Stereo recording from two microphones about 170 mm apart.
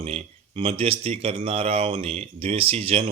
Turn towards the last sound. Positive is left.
turn(degrees=-35)  # may be behind; listen again after turning